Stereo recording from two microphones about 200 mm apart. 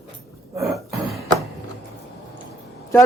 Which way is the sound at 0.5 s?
Centre (ahead or behind).